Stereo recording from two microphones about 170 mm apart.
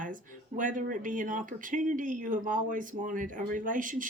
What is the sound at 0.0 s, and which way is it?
Speech, 50° right (ahead or behind).